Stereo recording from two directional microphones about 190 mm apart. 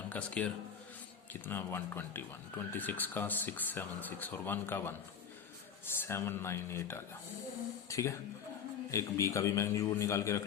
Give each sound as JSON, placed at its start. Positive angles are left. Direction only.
{"t": 0.1, "sound": "a man's voice", "side_deg": 5}
{"t": 6.1, "sound": "speech", "side_deg": 15}